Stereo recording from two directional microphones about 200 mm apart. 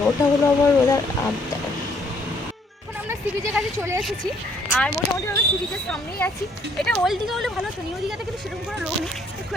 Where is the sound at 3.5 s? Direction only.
10° right (ahead or behind).